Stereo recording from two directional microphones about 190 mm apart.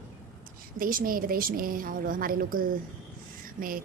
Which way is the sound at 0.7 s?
50° right (ahead or behind).